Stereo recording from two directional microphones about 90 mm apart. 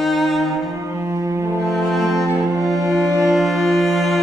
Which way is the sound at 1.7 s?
Centre (ahead or behind).